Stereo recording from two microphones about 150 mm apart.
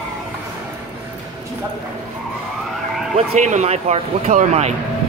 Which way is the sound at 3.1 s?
50° right (ahead or behind).